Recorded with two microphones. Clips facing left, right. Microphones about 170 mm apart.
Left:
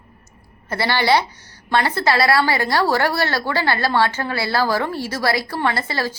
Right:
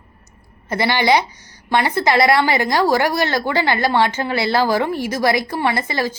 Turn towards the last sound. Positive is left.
turn(degrees=-15)  # may be behind; listen again after turning